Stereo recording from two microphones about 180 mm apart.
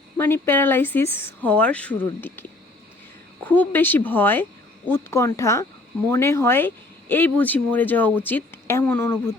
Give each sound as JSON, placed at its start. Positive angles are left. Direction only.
{"t": 0.2, "sound": "speech", "side_deg": 10}